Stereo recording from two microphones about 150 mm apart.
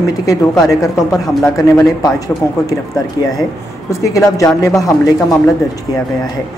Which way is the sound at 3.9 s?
20° left (ahead or behind).